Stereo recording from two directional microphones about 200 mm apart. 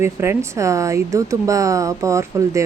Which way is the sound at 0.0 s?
15° right (ahead or behind).